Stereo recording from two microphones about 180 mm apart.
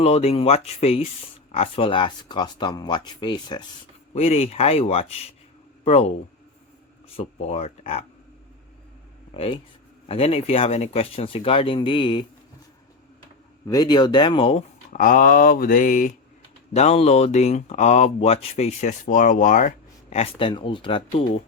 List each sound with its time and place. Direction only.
0.0 s speech: 35° left (ahead or behind)
4.1 s speech: 35° left (ahead or behind)
7.2 s speech: 35° left (ahead or behind)
9.3 s speech: 30° left (ahead or behind)
13.7 s speech: 20° left (ahead or behind)
14.9 s mantra: 50° left (ahead or behind)
16.7 s speech: 35° left (ahead or behind)